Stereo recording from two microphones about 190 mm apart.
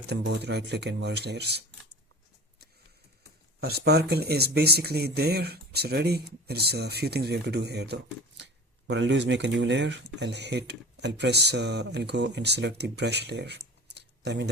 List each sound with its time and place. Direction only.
0.1 s speech: 60° right (ahead or behind)
3.6 s speech: 55° right (ahead or behind)